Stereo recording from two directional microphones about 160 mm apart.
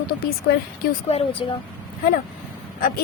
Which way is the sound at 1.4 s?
35° left (ahead or behind).